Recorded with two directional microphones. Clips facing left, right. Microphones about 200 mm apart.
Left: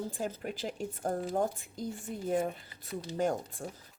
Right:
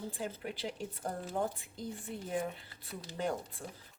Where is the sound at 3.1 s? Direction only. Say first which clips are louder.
Left 5 dB; 45° left (ahead or behind).